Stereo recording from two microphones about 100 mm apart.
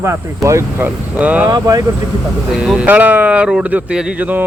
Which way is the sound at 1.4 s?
40° right (ahead or behind).